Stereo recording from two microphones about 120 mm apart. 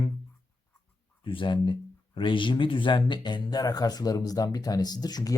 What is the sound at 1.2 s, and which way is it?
Speech, 45° left (ahead or behind).